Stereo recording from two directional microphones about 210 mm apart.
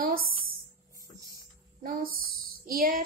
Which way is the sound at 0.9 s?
15° right (ahead or behind).